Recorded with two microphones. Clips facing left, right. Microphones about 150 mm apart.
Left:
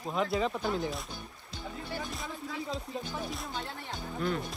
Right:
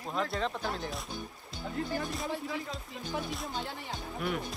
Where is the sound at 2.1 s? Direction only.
Centre (ahead or behind).